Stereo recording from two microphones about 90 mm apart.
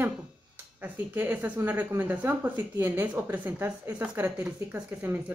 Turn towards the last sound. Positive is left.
turn(degrees=-20)  # may be behind; listen again after turning